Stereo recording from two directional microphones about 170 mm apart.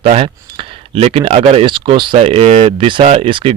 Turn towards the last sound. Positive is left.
turn(degrees=-30)  # may be behind; listen again after turning